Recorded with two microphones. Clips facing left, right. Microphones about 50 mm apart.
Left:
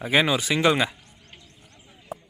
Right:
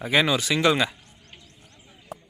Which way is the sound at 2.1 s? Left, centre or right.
Centre.